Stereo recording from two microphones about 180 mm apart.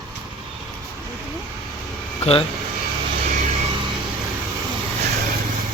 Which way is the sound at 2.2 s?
35° left (ahead or behind).